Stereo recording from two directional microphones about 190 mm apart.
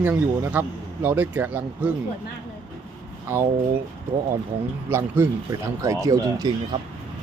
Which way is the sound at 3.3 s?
15° right (ahead or behind).